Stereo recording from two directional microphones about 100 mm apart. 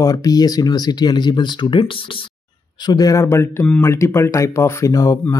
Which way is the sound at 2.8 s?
40° left (ahead or behind).